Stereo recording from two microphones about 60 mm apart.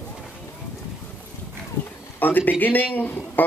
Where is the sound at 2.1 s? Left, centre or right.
Left.